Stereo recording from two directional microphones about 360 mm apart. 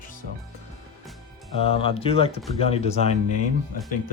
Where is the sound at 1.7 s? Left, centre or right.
Centre.